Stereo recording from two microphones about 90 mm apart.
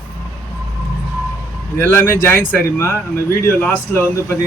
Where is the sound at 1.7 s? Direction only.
25° left (ahead or behind).